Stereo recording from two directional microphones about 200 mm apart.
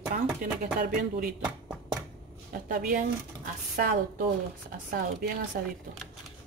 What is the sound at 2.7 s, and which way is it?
Speech, 40° right (ahead or behind).